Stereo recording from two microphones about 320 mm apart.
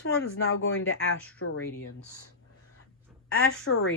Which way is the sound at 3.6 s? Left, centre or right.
Left.